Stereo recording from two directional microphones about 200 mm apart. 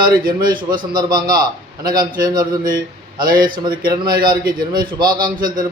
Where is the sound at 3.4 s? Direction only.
20° right (ahead or behind).